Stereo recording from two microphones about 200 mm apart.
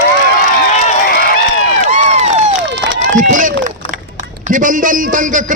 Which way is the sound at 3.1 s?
40° right (ahead or behind).